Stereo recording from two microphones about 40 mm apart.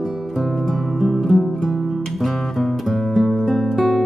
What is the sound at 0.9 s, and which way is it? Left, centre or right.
Music, centre.